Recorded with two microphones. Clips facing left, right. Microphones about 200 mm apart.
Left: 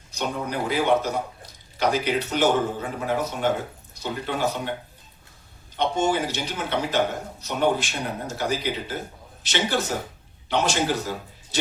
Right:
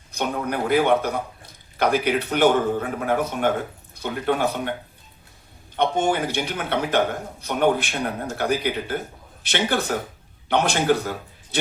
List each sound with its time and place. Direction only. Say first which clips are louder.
0.1 s a man's voice: right 3 dB; 55° right (ahead or behind)
5.7 s a man's voice: right 2 dB; 55° right (ahead or behind)